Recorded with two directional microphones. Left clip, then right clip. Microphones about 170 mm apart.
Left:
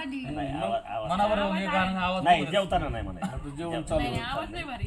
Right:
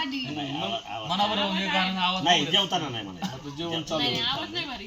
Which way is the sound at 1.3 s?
5° left (ahead or behind).